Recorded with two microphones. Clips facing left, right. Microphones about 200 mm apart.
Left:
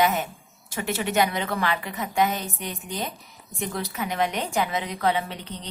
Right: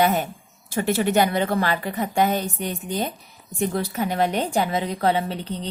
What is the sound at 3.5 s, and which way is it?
Speech, 35° right (ahead or behind).